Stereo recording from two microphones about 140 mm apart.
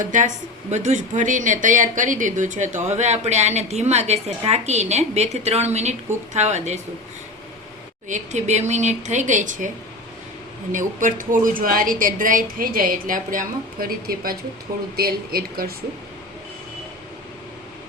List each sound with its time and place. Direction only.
0.0 s a woman's voice: 65° right (ahead or behind)
0.7 s speech: 55° right (ahead or behind)
8.0 s a woman's voice: 60° right (ahead or behind); by 15.7 s 90° right